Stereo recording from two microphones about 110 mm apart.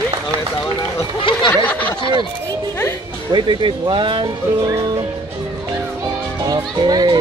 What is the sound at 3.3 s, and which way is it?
Speech, 45° right (ahead or behind).